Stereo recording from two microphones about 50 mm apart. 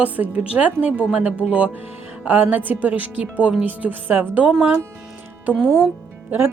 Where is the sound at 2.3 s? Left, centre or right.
Right.